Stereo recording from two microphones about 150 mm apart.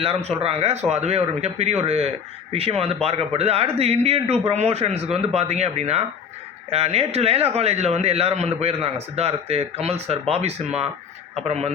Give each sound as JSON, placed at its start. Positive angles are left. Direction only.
{"t": 0.0, "sound": "a man's voice", "side_deg": -45}